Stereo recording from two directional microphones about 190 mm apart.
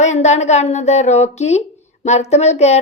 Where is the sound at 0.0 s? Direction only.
35° left (ahead or behind).